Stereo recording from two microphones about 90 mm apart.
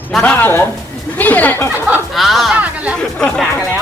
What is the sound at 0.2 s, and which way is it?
Speech, 20° left (ahead or behind).